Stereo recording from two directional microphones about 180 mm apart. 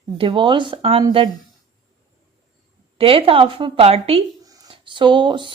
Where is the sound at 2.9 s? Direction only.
30° right (ahead or behind).